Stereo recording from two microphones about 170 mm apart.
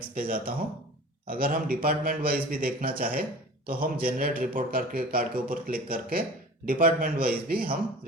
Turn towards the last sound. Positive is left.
turn(degrees=-60)  # may be behind; listen again after turning